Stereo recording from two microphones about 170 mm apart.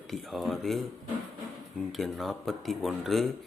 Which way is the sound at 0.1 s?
Centre (ahead or behind).